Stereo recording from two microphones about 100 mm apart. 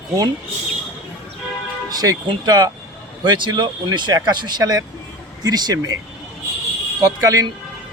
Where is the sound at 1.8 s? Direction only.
40° right (ahead or behind).